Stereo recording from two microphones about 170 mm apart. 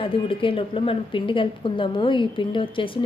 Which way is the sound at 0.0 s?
30° left (ahead or behind).